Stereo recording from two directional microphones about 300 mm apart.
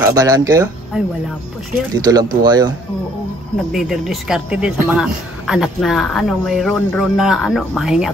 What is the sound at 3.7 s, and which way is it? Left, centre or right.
Speech, centre.